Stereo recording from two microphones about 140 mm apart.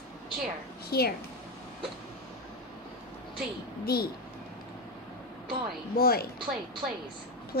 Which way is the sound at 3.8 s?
90° left.